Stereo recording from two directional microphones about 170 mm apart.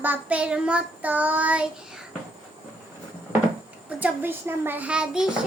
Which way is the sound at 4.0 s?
10° right (ahead or behind).